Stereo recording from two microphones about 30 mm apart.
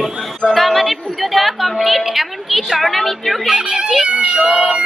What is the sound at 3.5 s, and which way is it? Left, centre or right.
Speech, right.